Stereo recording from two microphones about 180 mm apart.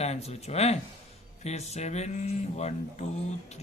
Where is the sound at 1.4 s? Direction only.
35° left (ahead or behind).